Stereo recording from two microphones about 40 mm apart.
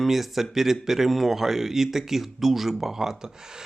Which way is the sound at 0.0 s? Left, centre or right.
Centre.